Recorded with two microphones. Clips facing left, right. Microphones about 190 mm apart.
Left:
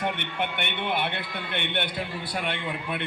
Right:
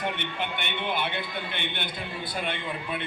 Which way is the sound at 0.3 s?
60° left (ahead or behind).